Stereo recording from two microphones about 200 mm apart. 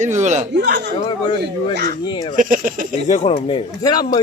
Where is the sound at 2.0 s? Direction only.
25° left (ahead or behind).